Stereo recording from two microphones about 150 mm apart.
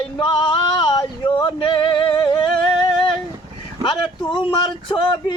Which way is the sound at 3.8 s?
30° left (ahead or behind).